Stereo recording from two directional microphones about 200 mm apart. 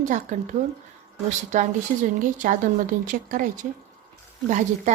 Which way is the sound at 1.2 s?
40° right (ahead or behind).